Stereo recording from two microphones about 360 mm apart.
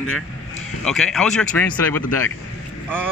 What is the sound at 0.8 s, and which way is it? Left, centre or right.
Speech, centre.